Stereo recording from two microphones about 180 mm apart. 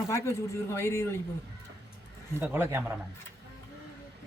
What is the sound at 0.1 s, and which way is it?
A man's voice, 15° left (ahead or behind).